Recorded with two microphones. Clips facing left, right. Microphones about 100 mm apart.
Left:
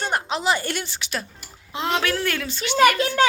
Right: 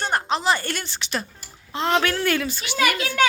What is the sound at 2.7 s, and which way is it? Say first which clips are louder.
Speech: left 6 dB; 40° left (ahead or behind).